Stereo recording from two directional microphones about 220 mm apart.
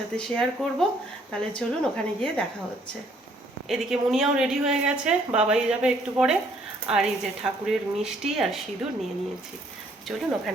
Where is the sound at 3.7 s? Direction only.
Centre (ahead or behind).